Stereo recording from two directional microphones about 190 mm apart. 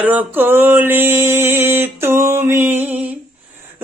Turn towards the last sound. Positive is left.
turn(degrees=-10)  # may be behind; listen again after turning